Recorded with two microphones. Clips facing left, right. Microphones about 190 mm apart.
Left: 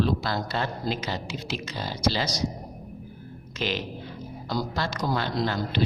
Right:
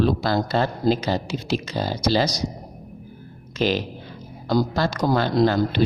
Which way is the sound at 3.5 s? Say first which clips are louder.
Right 7 dB; 40° right (ahead or behind).